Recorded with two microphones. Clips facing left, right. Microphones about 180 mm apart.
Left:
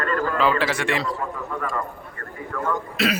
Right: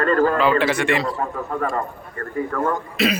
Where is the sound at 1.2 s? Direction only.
40° right (ahead or behind).